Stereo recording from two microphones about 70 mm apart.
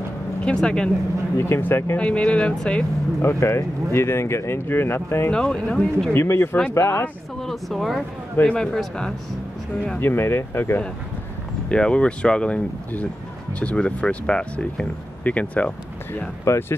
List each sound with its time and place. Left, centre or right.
0.5 s speech: centre
1.4 s speech: left
2.0 s speech: centre
3.2 s speech: left
5.3 s speech: centre
6.1 s speech: left
7.3 s speech: centre
8.4 s speech: centre
9.9 s speech: left
11.7 s speech: centre
16.4 s speech: left